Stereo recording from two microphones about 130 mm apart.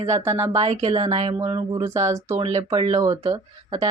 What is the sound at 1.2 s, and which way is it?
Speech, 45° right (ahead or behind).